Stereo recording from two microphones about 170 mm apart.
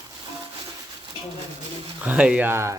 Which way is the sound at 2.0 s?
5° right (ahead or behind).